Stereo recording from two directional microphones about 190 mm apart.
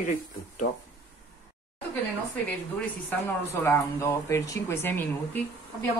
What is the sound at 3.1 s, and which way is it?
Speech, 15° left (ahead or behind).